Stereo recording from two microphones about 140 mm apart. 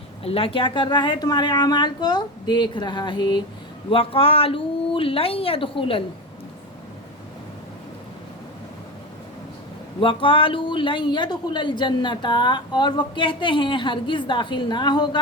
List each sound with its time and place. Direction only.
0.2 s speech: 40° left (ahead or behind)
10.0 s speech: 40° left (ahead or behind)